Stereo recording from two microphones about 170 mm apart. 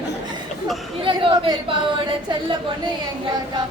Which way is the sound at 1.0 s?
30° right (ahead or behind).